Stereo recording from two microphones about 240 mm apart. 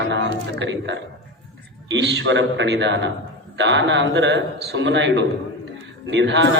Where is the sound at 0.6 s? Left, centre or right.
Right.